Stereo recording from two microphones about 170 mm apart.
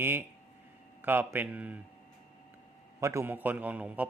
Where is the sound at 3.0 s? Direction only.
15° right (ahead or behind).